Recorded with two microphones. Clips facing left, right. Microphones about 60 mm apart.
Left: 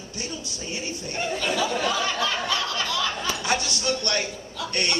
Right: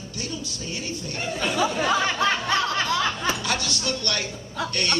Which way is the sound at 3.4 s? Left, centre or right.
Left.